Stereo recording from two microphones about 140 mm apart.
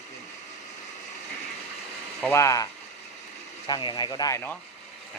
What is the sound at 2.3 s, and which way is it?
Speech, 20° left (ahead or behind).